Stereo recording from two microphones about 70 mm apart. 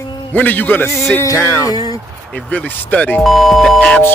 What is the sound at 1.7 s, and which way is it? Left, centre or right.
Speech, left.